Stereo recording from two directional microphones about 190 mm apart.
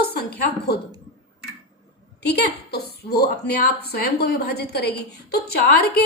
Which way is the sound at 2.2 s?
55° left (ahead or behind).